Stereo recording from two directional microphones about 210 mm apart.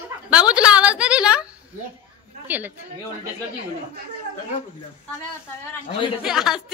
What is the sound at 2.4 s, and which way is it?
Speech, 10° right (ahead or behind).